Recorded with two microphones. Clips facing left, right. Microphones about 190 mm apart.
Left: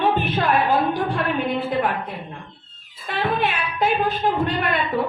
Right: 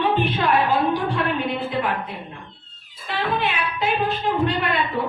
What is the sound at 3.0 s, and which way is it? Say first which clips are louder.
Speech: left 1 dB; 55° left (ahead or behind).